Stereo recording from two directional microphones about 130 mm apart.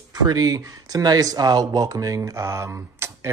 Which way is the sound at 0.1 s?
30° right (ahead or behind).